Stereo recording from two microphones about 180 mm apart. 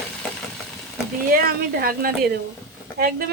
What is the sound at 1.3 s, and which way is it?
A woman's voice, 55° right (ahead or behind).